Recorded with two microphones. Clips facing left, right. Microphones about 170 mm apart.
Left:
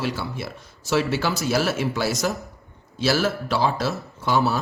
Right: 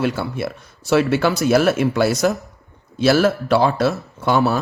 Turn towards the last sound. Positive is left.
turn(degrees=-60)  # may be behind; listen again after turning